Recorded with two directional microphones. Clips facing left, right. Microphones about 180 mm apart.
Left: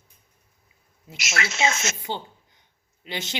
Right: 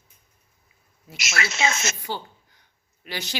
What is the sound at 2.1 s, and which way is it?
Speech, 20° left (ahead or behind).